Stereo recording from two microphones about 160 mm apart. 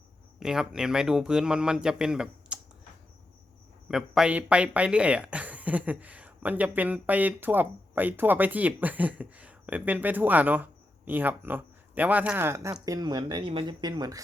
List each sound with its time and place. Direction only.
0.3 s speech: 5° right (ahead or behind)
3.8 s speech: 5° right (ahead or behind); by 14.2 s 25° right (ahead or behind)